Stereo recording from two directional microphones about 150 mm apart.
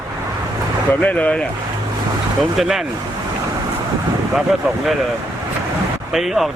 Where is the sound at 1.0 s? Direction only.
10° left (ahead or behind).